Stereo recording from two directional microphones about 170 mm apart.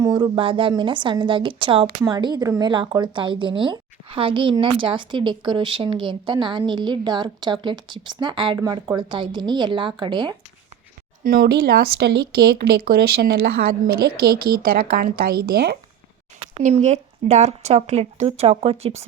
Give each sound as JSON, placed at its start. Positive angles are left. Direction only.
{"t": 0.0, "sound": "speech", "side_deg": -25}
{"t": 11.2, "sound": "speech", "side_deg": -60}
{"t": 16.6, "sound": "speech", "side_deg": -40}